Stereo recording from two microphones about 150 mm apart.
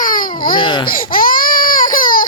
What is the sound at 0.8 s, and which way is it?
Baby cry, 70° left (ahead or behind).